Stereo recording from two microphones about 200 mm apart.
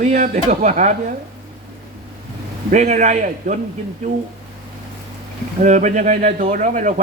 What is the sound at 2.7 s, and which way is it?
Speech, 35° right (ahead or behind).